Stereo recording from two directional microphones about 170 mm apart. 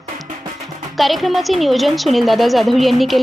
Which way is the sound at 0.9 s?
Centre (ahead or behind).